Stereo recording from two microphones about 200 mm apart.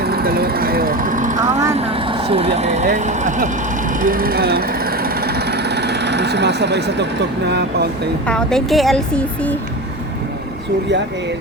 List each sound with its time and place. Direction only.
0.0 s speech: 50° right (ahead or behind)
8.3 s a woman's voice: 5° left (ahead or behind)